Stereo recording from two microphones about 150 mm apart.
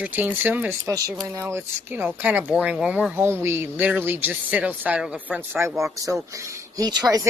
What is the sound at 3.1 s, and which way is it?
Speech, 15° right (ahead or behind).